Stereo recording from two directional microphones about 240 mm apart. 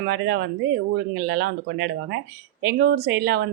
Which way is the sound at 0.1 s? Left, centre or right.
Right.